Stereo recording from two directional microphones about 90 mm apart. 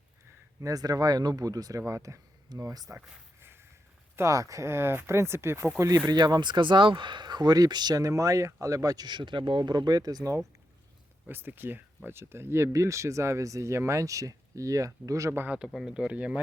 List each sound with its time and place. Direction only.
0.6 s speech: 45° right (ahead or behind)
4.2 s speech: 35° right (ahead or behind)
6.1 s speech: 50° right (ahead or behind)
9.0 s speech: 60° right (ahead or behind)
11.3 s speech: 25° right (ahead or behind)
15.5 s speech: 5° right (ahead or behind)